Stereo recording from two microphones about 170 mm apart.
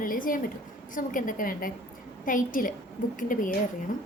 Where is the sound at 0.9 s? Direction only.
50° left (ahead or behind).